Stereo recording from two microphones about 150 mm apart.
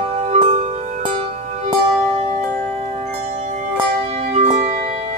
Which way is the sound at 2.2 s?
55° right (ahead or behind).